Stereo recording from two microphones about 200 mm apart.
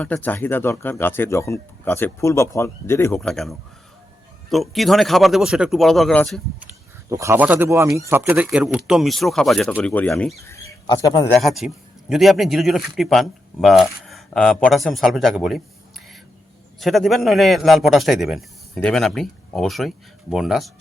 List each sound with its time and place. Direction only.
0.0 s speech: 10° left (ahead or behind)
3.2 s a man's voice: centre (ahead or behind)
7.1 s a man's voice: 15° right (ahead or behind); by 10.3 s 5° left (ahead or behind)
10.4 s speech: 15° left (ahead or behind)
11.3 s a man's voice: centre (ahead or behind)
16.8 s a man's voice: centre (ahead or behind)